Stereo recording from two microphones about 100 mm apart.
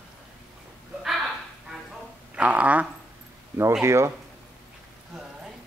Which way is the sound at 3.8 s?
30° right (ahead or behind).